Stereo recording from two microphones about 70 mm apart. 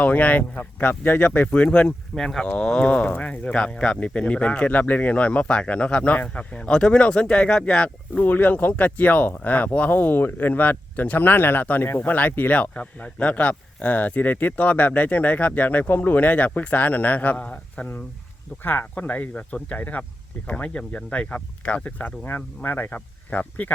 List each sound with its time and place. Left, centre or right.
0.0 s speech: left
8.2 s speech: left